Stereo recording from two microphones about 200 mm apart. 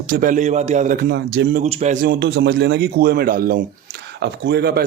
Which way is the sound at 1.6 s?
35° right (ahead or behind).